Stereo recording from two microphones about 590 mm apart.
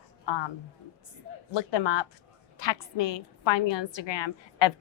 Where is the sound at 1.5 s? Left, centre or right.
Left.